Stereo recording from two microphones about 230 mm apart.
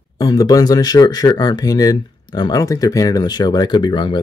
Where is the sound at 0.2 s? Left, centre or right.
Centre.